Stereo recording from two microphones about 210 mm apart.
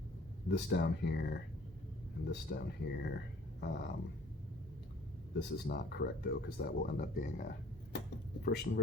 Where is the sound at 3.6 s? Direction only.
55° left (ahead or behind).